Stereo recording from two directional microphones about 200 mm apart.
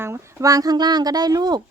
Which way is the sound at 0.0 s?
15° right (ahead or behind).